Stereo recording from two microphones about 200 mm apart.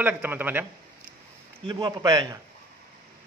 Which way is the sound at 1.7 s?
20° right (ahead or behind).